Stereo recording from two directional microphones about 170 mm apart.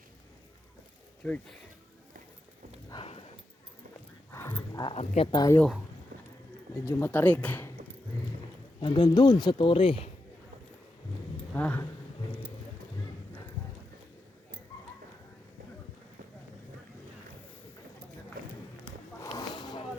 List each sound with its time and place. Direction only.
1.2 s speech: 5° left (ahead or behind)
2.9 s clip-clop: 35° left (ahead or behind)
4.3 s dog: 15° left (ahead or behind)
4.8 s speech: 35° left (ahead or behind)
6.8 s speech: 15° left (ahead or behind)
8.8 s speech: 25° left (ahead or behind)
11.5 s speech: 10° left (ahead or behind)
19.2 s a sound: 20° left (ahead or behind)